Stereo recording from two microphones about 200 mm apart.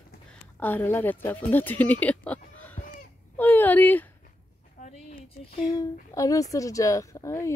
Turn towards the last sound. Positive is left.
turn(degrees=15)  # may be behind; listen again after turning